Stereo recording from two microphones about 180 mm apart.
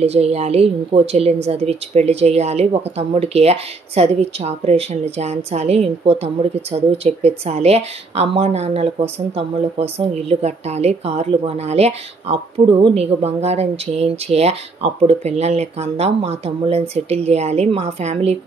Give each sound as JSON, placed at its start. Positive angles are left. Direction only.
{"t": 0.0, "sound": "speech", "side_deg": -35}